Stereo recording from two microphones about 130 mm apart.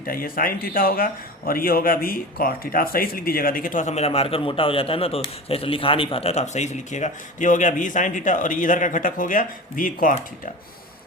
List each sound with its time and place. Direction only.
0.0 s a man's voice: 90° left